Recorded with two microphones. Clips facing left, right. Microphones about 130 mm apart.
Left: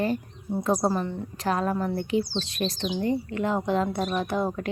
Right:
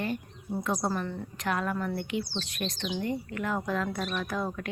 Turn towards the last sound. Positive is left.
turn(degrees=30)  # may be behind; listen again after turning